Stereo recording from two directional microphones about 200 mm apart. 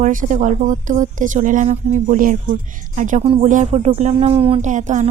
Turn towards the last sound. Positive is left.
turn(degrees=-40)  # may be behind; listen again after turning